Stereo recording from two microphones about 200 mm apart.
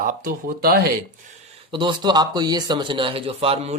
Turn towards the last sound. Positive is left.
turn(degrees=-30)  # may be behind; listen again after turning